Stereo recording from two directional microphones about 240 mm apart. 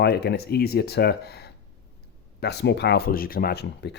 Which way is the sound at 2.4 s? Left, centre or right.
Left.